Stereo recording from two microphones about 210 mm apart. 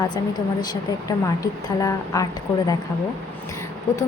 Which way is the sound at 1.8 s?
15° left (ahead or behind).